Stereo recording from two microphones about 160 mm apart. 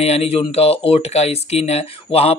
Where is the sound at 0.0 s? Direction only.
40° left (ahead or behind).